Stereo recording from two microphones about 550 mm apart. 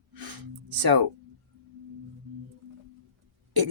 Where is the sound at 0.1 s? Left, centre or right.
Right.